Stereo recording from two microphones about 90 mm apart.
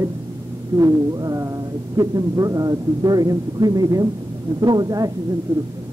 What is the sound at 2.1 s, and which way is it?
A man's voice, 40° right (ahead or behind).